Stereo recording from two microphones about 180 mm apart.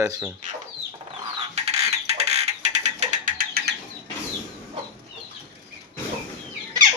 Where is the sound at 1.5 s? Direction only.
35° right (ahead or behind); by 3.7 s 55° right (ahead or behind).